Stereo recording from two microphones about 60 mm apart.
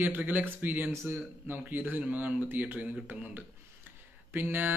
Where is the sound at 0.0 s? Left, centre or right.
Right.